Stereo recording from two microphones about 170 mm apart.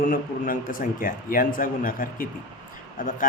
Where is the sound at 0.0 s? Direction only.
55° left (ahead or behind).